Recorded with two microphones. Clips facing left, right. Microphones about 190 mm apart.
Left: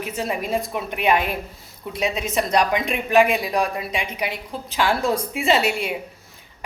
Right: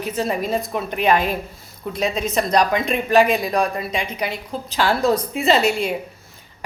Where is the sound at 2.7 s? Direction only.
15° left (ahead or behind).